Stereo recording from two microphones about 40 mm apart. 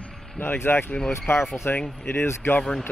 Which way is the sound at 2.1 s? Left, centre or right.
Left.